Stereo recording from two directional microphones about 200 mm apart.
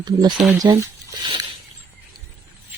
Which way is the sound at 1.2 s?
20° right (ahead or behind).